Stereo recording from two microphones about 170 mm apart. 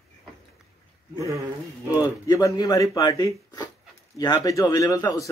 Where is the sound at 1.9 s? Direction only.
20° left (ahead or behind).